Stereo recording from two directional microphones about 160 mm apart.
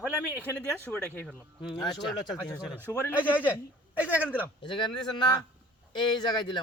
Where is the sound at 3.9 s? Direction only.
10° right (ahead or behind).